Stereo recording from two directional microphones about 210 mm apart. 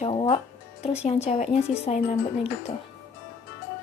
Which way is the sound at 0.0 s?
25° left (ahead or behind).